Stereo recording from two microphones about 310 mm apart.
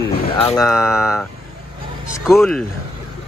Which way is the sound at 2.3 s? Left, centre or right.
Centre.